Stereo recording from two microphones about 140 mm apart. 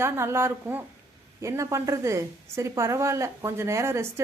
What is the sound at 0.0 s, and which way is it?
A woman's voice, 20° right (ahead or behind).